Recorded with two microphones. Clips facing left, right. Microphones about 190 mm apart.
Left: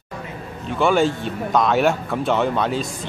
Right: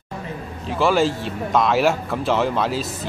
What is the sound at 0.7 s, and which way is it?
Speech, centre (ahead or behind).